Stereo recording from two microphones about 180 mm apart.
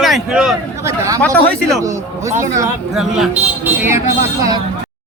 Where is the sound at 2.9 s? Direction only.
5° right (ahead or behind).